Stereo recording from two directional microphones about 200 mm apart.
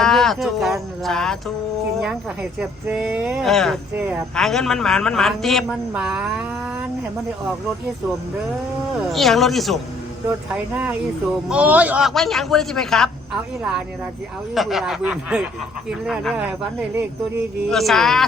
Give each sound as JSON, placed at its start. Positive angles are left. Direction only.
{"t": 0.0, "sound": "speech", "side_deg": 0}
{"t": 2.6, "sound": "a man's voice", "side_deg": -5}
{"t": 3.9, "sound": "speech", "side_deg": -10}
{"t": 4.4, "sound": "a man's voice", "side_deg": 0}
{"t": 9.0, "sound": "a man's voice", "side_deg": 0}
{"t": 17.7, "sound": "a man's voice", "side_deg": 0}